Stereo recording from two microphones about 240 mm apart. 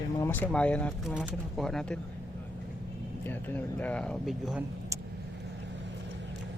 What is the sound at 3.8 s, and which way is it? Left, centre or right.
Speech, centre.